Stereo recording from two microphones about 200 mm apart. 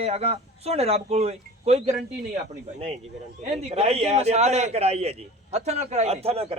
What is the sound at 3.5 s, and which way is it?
A man's voice, 30° right (ahead or behind).